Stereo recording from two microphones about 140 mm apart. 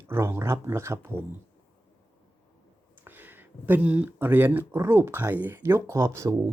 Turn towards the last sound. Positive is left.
turn(degrees=-20)  # may be behind; listen again after turning